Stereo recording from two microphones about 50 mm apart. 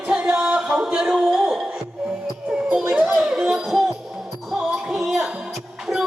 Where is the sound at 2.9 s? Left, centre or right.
Right.